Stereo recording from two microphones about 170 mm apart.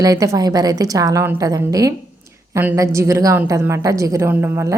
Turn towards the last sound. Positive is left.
turn(degrees=-15)  # may be behind; listen again after turning